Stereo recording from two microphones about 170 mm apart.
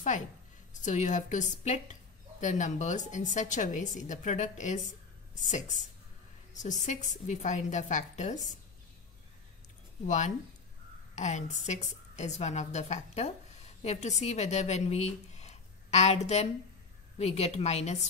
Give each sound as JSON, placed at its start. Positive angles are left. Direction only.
{"t": 0.7, "sound": "a woman's voice", "side_deg": 45}
{"t": 10.0, "sound": "a woman's voice", "side_deg": 45}